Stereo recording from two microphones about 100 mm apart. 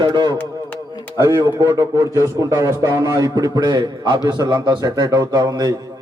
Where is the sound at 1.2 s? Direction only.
30° right (ahead or behind).